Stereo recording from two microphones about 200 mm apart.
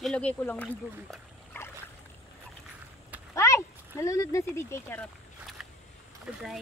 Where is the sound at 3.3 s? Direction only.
15° left (ahead or behind).